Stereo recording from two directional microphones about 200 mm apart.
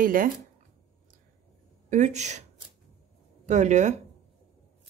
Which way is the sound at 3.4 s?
35° right (ahead or behind).